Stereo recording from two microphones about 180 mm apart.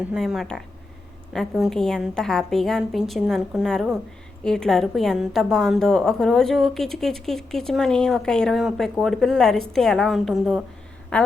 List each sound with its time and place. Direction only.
0.1 s a woman's voice: centre (ahead or behind)